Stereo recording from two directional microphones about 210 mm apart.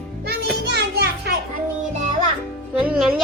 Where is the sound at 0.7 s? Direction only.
50° right (ahead or behind).